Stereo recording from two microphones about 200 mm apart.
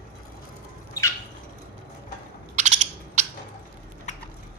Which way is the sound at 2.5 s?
35° right (ahead or behind).